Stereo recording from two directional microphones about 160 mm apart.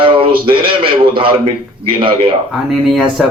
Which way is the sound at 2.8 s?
Centre (ahead or behind).